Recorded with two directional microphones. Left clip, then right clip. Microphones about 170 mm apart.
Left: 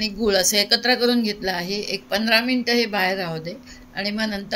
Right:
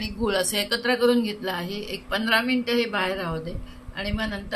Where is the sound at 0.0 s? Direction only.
15° left (ahead or behind).